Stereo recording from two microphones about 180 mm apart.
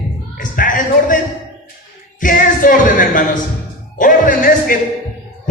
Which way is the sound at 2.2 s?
50° left (ahead or behind).